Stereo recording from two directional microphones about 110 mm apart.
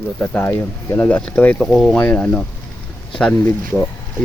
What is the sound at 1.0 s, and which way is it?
Speech, 10° left (ahead or behind).